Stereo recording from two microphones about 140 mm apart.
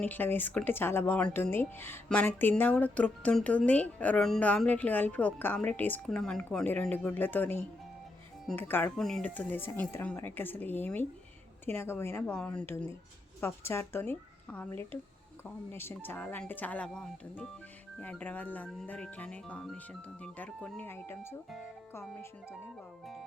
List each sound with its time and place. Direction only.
0.0 s speech: 15° left (ahead or behind)
9.0 s speech: 5° left (ahead or behind)